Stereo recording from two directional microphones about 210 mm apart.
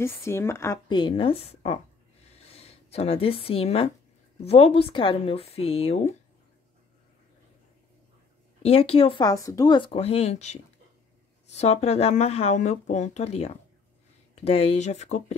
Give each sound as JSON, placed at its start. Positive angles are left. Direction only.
{"t": 0.0, "sound": "speech", "side_deg": 10}
{"t": 2.3, "sound": "a sound", "side_deg": 30}
{"t": 4.5, "sound": "speech", "side_deg": 30}
{"t": 8.6, "sound": "speech", "side_deg": 30}